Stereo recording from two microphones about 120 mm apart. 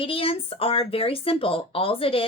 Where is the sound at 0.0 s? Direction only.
50° left (ahead or behind).